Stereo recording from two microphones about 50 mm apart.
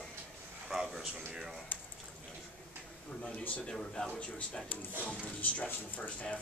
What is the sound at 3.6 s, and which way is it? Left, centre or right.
Speech, centre.